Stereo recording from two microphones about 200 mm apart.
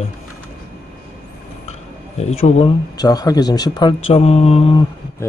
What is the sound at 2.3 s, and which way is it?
Speech, 30° left (ahead or behind).